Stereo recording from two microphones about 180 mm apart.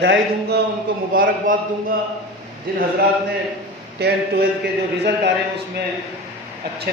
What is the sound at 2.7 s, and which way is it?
Speech, 60° right (ahead or behind).